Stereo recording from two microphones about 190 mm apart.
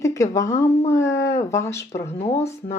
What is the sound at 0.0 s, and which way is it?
Speech, 15° left (ahead or behind).